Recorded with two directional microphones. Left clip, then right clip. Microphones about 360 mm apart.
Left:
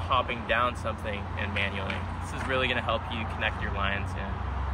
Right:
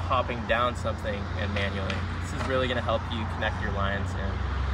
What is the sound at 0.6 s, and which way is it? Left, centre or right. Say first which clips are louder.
Speech: right 1 dB; centre.